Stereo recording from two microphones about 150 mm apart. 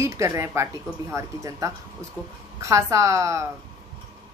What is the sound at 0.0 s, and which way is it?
Speech, 20° right (ahead or behind).